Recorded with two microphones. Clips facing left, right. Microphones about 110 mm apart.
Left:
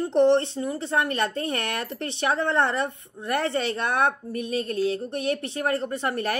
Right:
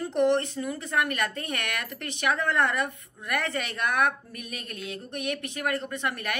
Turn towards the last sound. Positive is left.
turn(degrees=35)  # may be behind; listen again after turning